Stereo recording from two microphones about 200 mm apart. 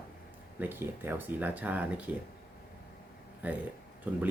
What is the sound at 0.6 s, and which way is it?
Speech, 10° right (ahead or behind).